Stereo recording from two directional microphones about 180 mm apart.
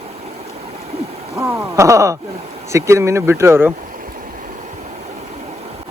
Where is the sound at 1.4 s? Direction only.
15° right (ahead or behind).